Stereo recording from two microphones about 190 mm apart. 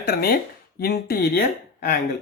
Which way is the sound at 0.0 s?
55° left (ahead or behind).